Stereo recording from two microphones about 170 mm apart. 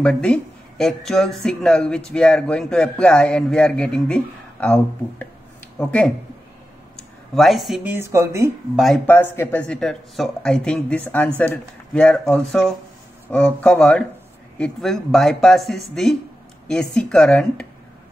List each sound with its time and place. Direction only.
0.0 s speech: 5° left (ahead or behind)
7.3 s speech: centre (ahead or behind)
7.9 s speech: 15° right (ahead or behind)
8.7 s speech: centre (ahead or behind)